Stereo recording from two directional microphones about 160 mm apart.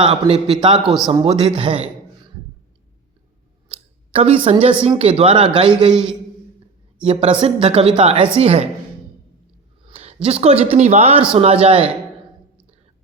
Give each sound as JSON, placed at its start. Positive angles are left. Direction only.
{"t": 0.0, "sound": "speech", "side_deg": -35}
{"t": 0.8, "sound": "a man's voice", "side_deg": 0}
{"t": 1.2, "sound": "speech", "side_deg": -30}
{"t": 4.1, "sound": "a woman's voice", "side_deg": -35}
{"t": 5.9, "sound": "a man's voice", "side_deg": -5}
{"t": 7.0, "sound": "speech", "side_deg": -35}
{"t": 9.8, "sound": "a sound", "side_deg": -40}
{"t": 10.4, "sound": "speech", "side_deg": -40}